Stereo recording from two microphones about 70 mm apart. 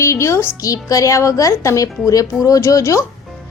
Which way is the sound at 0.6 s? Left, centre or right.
Left.